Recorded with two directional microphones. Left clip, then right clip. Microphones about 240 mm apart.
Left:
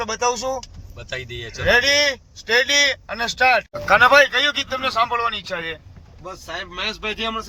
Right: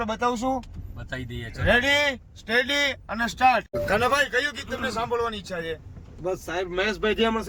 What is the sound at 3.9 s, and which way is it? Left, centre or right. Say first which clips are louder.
Speech: left 10 dB; left.